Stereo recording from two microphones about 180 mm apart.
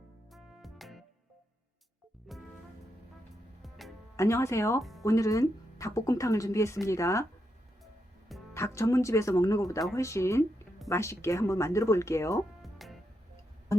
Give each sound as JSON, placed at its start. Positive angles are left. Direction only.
{"t": 0.3, "sound": "music", "side_deg": 0}
{"t": 2.3, "sound": "music", "side_deg": 0}
{"t": 3.6, "sound": "music", "side_deg": 0}
{"t": 4.2, "sound": "a woman's voice", "side_deg": 15}
{"t": 4.8, "sound": "music", "side_deg": 0}
{"t": 5.0, "sound": "a woman's voice", "side_deg": 15}
{"t": 8.5, "sound": "a woman's voice", "side_deg": 15}
{"t": 12.6, "sound": "music", "side_deg": 0}